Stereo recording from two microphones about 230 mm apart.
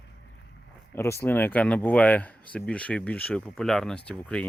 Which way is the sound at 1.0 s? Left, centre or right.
Centre.